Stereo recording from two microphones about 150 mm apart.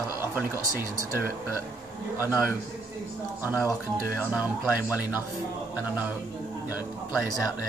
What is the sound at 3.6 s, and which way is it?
Speech, 15° left (ahead or behind).